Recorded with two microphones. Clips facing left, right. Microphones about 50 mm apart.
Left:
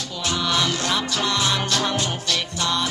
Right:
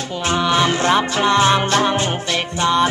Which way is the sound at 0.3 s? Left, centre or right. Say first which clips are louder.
Right 6 dB; right.